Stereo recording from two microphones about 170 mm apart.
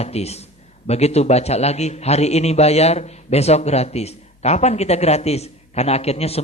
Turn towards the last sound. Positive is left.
turn(degrees=35)  # may be behind; listen again after turning